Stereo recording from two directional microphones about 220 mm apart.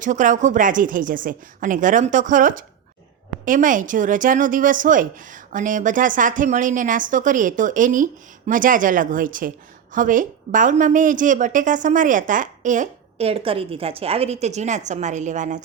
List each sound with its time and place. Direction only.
0.0 s a woman's voice: 35° right (ahead or behind)